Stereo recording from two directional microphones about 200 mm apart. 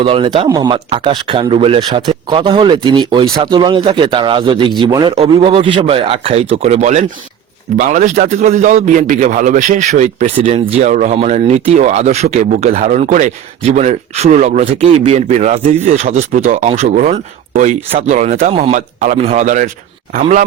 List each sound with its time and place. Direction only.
0.0 s a man's voice: 25° right (ahead or behind)